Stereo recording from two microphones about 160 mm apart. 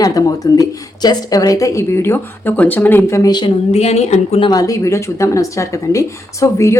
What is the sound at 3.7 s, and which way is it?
Speech, 40° left (ahead or behind).